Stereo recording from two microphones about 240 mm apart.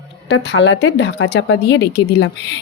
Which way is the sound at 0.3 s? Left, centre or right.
Left.